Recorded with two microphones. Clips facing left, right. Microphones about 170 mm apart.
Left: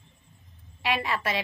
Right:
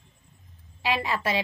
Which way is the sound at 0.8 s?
30° right (ahead or behind).